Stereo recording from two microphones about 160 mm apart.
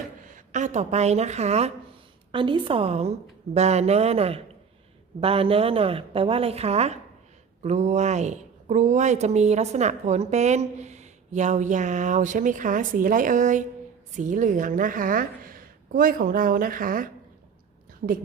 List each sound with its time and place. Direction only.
0.3 s a woman's voice: 50° right (ahead or behind)
2.3 s a woman's voice: 30° right (ahead or behind); by 17.1 s 60° right (ahead or behind)
18.0 s a woman's voice: 70° right (ahead or behind)